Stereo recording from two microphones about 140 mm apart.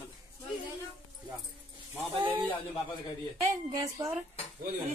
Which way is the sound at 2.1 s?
35° right (ahead or behind).